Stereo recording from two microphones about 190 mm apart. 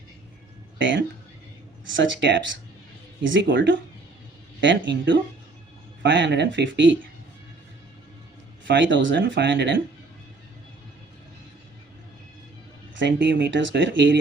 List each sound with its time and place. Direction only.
0.8 s speech: 75° right (ahead or behind)
8.6 s speech: 70° right (ahead or behind)
13.0 s speech: 70° right (ahead or behind)